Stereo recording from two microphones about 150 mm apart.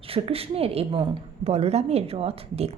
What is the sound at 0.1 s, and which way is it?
A woman's voice, 40° right (ahead or behind).